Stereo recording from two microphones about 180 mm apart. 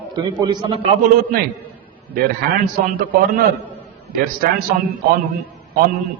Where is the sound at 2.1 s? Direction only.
55° right (ahead or behind).